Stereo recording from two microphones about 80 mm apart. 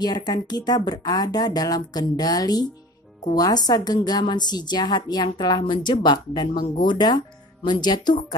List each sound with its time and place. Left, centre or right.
0.0 s a woman's voice: left